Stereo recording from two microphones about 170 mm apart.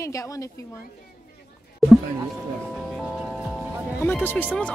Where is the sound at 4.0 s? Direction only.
15° left (ahead or behind).